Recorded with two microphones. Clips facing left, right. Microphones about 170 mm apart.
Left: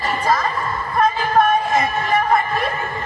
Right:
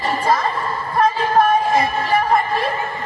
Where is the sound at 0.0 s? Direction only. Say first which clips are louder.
Right 1 dB; 25° right (ahead or behind).